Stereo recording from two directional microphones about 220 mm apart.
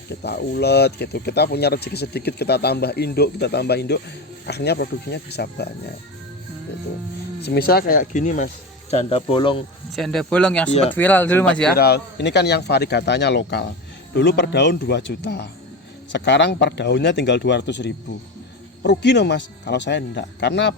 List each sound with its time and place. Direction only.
0.2 s speech: 45° left (ahead or behind)
7.4 s speech: 45° left (ahead or behind); by 9.6 s 25° left (ahead or behind)
9.9 s speech: centre (ahead or behind)
11.7 s speech: 45° left (ahead or behind)